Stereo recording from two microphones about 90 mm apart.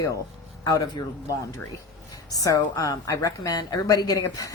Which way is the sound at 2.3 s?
40° left (ahead or behind).